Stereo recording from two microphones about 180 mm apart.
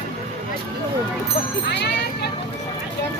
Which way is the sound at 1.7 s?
65° left (ahead or behind).